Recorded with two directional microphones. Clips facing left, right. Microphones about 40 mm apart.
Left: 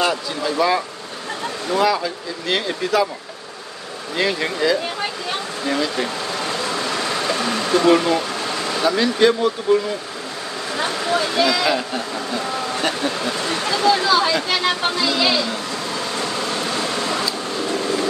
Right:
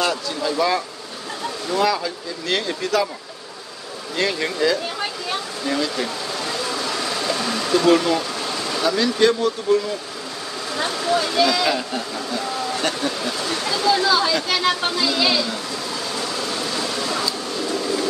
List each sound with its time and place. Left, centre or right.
0.0 s speech: centre
4.2 s speech: centre
6.8 s vehicle: left
8.7 s speech: centre
11.1 s speech: centre
16.6 s vehicle: left